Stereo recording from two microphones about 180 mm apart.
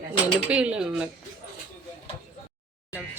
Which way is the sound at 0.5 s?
5° right (ahead or behind).